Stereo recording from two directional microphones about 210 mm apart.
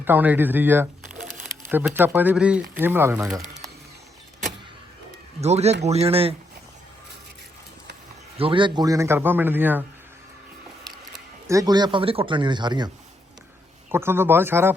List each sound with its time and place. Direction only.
0.0 s speech: 10° right (ahead or behind)
5.4 s speech: 30° right (ahead or behind)
8.4 s speech: 25° right (ahead or behind)
11.4 s speech: 15° right (ahead or behind)
13.9 s speech: 10° right (ahead or behind)